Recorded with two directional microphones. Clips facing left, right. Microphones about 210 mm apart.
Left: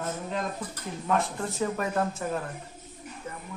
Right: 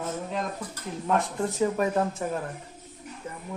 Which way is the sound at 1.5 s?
15° right (ahead or behind).